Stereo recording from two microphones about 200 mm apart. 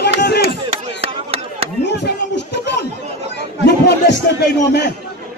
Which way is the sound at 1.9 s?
60° left (ahead or behind).